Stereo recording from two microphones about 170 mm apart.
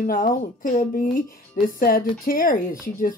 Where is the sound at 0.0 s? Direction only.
55° left (ahead or behind).